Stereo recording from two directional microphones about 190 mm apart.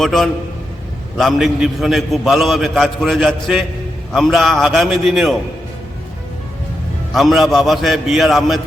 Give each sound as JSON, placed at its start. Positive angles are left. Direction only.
{"t": 0.0, "sound": "a man's voice", "side_deg": 0}
{"t": 7.1, "sound": "a man's voice", "side_deg": 0}